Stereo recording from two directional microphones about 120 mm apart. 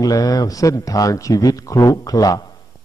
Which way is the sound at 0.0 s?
30° left (ahead or behind).